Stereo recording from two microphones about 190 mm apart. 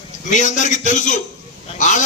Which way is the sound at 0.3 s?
40° left (ahead or behind).